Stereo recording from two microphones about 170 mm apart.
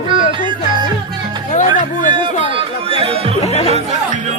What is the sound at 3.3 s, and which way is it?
Music, 40° left (ahead or behind).